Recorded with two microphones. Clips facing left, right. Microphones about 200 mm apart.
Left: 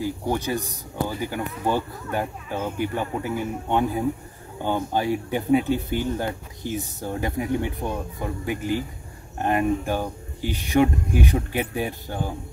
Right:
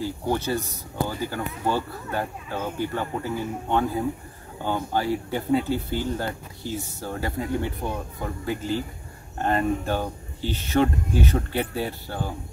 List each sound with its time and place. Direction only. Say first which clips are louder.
0.0 s speech: left 1 dB; 15° left (ahead or behind)